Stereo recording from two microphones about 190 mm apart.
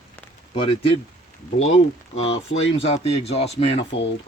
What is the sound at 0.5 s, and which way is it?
Speech, 30° left (ahead or behind).